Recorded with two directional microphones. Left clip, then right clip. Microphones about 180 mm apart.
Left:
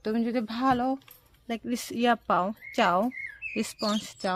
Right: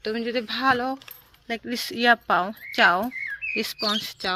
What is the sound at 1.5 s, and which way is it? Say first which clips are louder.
Speech: right 4 dB; 35° left (ahead or behind).